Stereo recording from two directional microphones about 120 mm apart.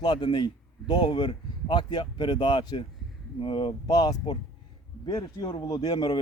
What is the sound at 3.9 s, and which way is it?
Speech, 35° left (ahead or behind).